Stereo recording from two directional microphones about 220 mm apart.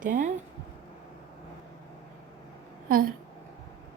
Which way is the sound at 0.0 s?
35° right (ahead or behind).